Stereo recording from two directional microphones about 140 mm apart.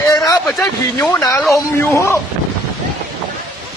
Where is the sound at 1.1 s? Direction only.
25° left (ahead or behind).